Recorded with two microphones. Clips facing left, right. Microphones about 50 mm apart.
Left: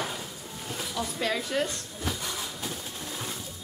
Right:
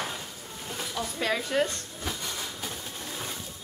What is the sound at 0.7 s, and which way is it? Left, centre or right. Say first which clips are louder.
Drawer open or close: left 1 dB; centre.